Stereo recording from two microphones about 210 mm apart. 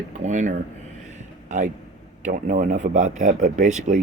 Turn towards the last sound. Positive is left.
turn(degrees=-35)  # may be behind; listen again after turning